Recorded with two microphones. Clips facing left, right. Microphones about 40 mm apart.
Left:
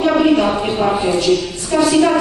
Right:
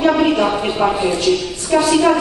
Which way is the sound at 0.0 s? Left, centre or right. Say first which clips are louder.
Left 1 dB; centre.